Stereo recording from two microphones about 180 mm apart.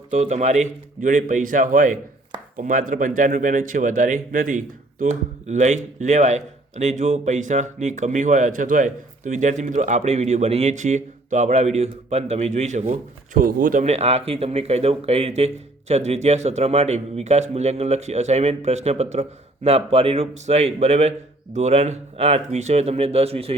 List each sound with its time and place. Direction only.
0.1 s a man's voice: 40° right (ahead or behind)